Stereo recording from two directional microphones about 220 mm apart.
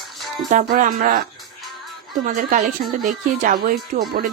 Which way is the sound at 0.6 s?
40° right (ahead or behind).